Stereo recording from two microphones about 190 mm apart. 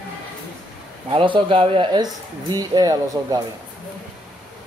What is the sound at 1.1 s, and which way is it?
Speech, 25° right (ahead or behind).